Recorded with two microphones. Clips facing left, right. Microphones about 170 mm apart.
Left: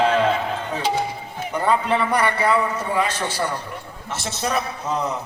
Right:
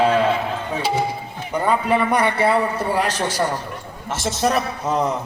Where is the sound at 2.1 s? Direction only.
25° right (ahead or behind).